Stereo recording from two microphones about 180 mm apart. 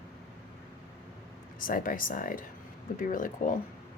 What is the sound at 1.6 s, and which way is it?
A woman's voice, 50° left (ahead or behind).